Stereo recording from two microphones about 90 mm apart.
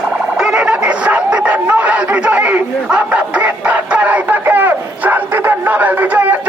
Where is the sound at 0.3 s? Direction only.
10° right (ahead or behind).